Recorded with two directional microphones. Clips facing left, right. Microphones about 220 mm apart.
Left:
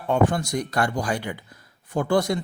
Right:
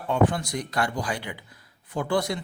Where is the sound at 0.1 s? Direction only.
45° left (ahead or behind).